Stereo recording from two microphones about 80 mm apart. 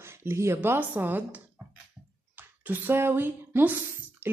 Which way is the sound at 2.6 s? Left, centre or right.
Right.